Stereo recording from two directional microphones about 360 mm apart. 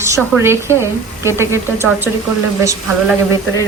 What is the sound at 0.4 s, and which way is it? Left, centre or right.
Speech, centre.